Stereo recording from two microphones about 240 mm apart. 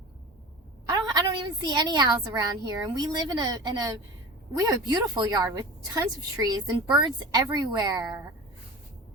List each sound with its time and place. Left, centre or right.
0.9 s a woman's voice: centre